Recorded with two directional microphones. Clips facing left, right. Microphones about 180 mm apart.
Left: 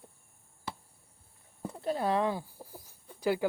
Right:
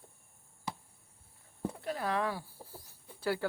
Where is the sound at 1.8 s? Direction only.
25° left (ahead or behind).